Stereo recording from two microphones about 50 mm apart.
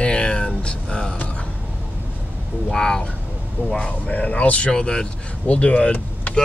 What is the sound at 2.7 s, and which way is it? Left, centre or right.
Speech, centre.